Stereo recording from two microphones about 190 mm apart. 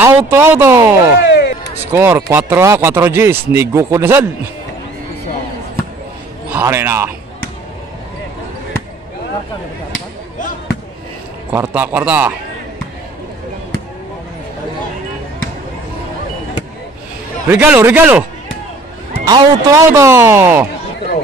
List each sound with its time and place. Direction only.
0.0 s speech: 15° right (ahead or behind)
1.2 s a sound: 60° left (ahead or behind)
1.9 s speech: 15° right (ahead or behind)
6.5 s speech: 10° right (ahead or behind)
11.5 s speech: 10° right (ahead or behind)
17.5 s speech: 10° right (ahead or behind)
19.2 s speech: 20° right (ahead or behind)